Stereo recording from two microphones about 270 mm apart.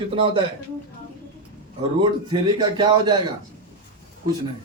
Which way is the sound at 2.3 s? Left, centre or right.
Centre.